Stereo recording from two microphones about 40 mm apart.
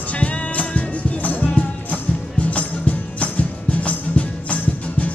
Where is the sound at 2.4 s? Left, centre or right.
Left.